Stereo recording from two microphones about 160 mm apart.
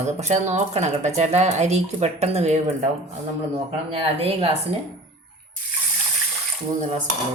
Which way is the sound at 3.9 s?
35° right (ahead or behind).